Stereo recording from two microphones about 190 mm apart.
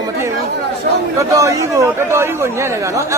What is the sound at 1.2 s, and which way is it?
Speech, 15° right (ahead or behind).